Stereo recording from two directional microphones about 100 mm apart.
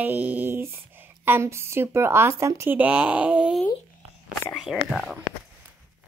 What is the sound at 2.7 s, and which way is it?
Speech, 15° right (ahead or behind).